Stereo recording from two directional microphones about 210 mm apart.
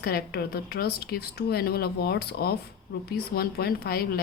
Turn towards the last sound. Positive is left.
turn(degrees=50)  # may be behind; listen again after turning